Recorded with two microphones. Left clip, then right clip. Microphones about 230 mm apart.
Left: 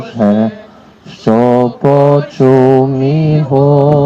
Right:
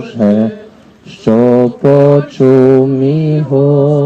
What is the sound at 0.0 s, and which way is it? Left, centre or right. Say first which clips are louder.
Speech: even; left.